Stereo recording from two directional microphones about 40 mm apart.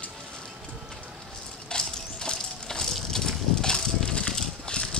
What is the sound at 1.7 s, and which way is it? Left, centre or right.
Crushing, centre.